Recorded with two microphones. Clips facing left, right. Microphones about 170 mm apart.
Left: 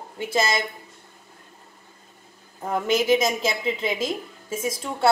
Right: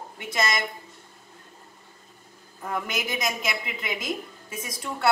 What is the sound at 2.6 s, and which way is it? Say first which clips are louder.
A woman's voice: left 9 dB; 25° left (ahead or behind).